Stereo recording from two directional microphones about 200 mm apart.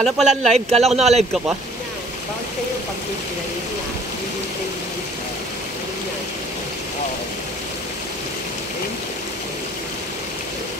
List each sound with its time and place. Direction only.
0.0 s speech: centre (ahead or behind)
0.7 s speech: 30° right (ahead or behind)